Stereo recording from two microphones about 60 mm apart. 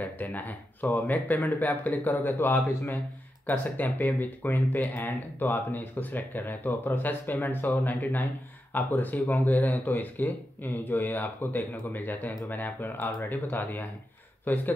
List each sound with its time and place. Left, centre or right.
0.0 s speech: left